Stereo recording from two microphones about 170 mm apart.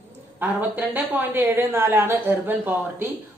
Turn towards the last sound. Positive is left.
turn(degrees=-10)  # may be behind; listen again after turning